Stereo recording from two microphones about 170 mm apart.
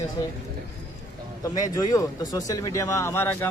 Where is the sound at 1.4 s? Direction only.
20° left (ahead or behind).